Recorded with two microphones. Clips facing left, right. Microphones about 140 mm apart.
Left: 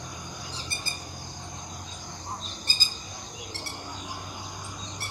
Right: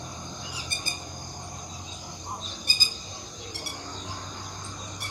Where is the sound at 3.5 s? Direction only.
15° right (ahead or behind).